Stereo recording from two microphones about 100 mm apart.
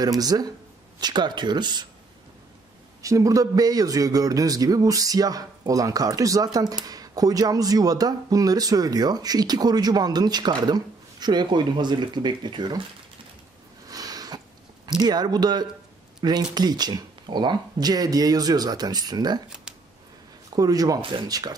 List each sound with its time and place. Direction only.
0.0 s a man's voice: 40° right (ahead or behind)
3.0 s a man's voice: 35° right (ahead or behind); by 12.8 s 50° right (ahead or behind)
13.8 s a sound: 40° right (ahead or behind)
14.9 s a man's voice: 45° right (ahead or behind)
20.4 s a man's voice: 40° right (ahead or behind)